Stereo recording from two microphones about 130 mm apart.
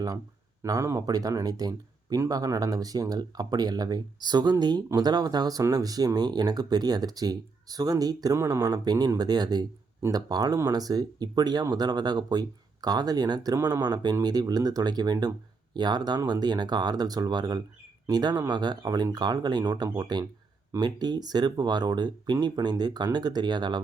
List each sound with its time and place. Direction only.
0.6 s speech: 25° right (ahead or behind)